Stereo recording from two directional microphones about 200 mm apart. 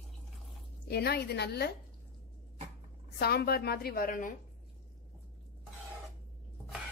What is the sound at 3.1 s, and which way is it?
A woman's voice, 50° left (ahead or behind).